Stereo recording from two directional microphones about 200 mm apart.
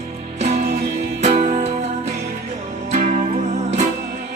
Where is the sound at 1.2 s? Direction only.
35° right (ahead or behind).